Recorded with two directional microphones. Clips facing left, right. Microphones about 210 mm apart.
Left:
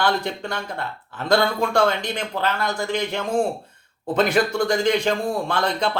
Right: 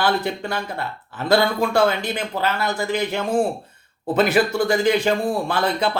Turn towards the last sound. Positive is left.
turn(degrees=-5)  # may be behind; listen again after turning